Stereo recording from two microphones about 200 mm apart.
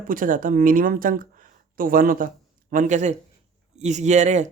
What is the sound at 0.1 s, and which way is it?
Speech, 40° right (ahead or behind).